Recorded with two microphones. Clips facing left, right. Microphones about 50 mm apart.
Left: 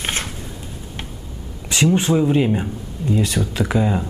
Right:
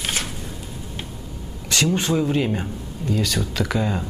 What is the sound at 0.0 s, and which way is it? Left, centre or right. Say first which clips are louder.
Shuffling cards: left 2 dB; left.